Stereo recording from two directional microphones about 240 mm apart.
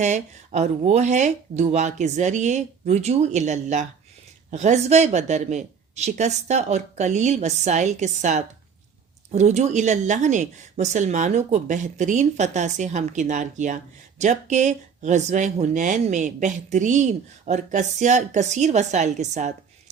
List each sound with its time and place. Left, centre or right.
0.0 s speech: right